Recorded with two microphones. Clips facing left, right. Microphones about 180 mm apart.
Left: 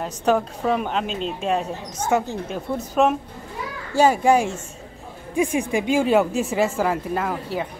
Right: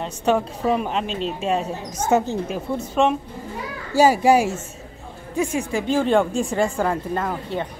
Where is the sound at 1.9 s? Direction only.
20° right (ahead or behind).